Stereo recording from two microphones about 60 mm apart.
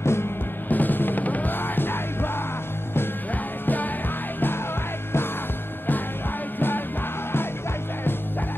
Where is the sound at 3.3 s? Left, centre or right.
Left.